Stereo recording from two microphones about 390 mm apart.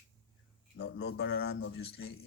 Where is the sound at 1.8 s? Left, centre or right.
Left.